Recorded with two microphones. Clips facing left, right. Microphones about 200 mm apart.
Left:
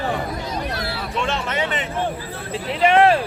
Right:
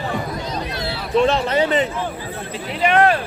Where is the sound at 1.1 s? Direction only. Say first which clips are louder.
Right 10 dB; 35° right (ahead or behind).